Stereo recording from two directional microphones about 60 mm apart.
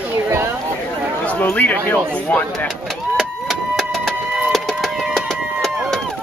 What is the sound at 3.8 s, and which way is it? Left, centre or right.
Printer, centre.